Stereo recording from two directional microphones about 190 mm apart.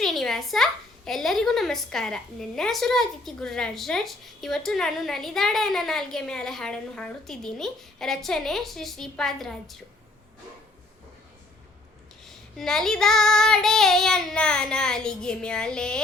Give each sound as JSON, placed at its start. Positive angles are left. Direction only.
{"t": 0.0, "sound": "a child's voice", "side_deg": 0}
{"t": 12.2, "sound": "a child's voice", "side_deg": 0}